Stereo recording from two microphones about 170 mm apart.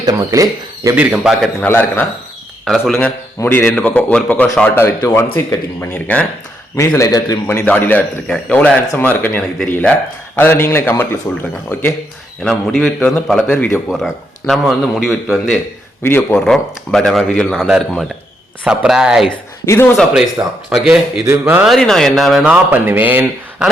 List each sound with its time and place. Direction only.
0.0 s speech: 20° right (ahead or behind)
0.9 s speech: 5° right (ahead or behind)
1.6 s speech: 10° left (ahead or behind)
2.6 s speech: centre (ahead or behind)
2.9 s speech: 10° left (ahead or behind)
12.4 s speech: 5° left (ahead or behind)
16.0 s speech: 10° left (ahead or behind)
16.4 s speech: centre (ahead or behind)
19.6 s speech: 15° left (ahead or behind)
20.7 s speech: 5° right (ahead or behind)